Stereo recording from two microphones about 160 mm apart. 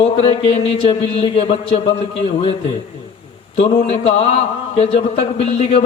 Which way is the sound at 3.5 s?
40° left (ahead or behind).